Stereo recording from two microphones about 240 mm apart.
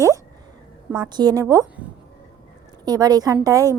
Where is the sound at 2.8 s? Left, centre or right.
Centre.